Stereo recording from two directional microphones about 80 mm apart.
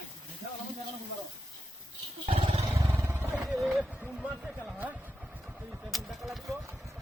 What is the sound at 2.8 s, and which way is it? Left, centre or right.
Vehicle, right.